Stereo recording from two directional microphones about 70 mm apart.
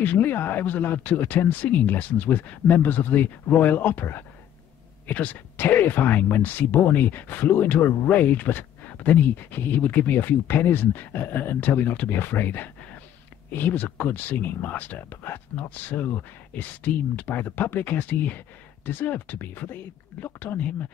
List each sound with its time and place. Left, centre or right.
0.0 s speech: left